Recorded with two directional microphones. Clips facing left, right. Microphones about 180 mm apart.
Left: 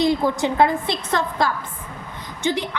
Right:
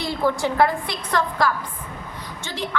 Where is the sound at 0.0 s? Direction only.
20° left (ahead or behind).